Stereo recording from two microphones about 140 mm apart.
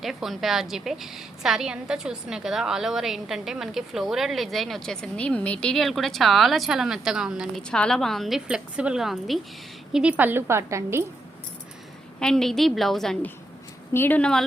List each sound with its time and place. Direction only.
0.0 s a woman's voice: centre (ahead or behind); by 11.0 s 20° right (ahead or behind)
12.2 s a woman's voice: 5° left (ahead or behind)
13.9 s speech: 15° left (ahead or behind)